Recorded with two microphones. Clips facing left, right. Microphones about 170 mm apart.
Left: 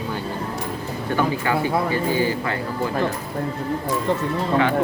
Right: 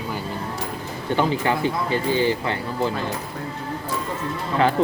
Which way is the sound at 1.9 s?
25° right (ahead or behind).